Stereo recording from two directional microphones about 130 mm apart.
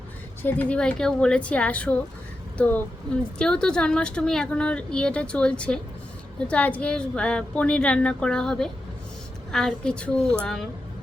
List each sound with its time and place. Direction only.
0.4 s a woman's voice: 10° left (ahead or behind)